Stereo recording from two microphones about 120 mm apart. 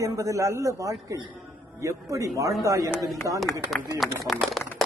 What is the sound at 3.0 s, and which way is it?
Speech, centre (ahead or behind).